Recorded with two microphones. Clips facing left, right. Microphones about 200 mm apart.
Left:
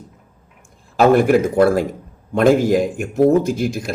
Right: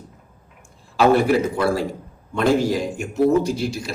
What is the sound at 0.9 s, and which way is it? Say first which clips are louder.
Speech: left 3 dB; 50° left (ahead or behind).